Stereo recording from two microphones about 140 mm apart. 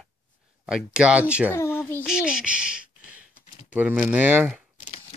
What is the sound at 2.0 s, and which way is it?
Speech, 5° right (ahead or behind).